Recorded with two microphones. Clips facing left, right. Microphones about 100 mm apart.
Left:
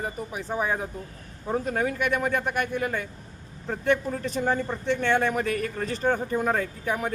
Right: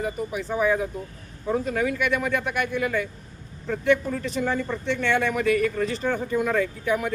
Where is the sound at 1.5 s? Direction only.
40° left (ahead or behind).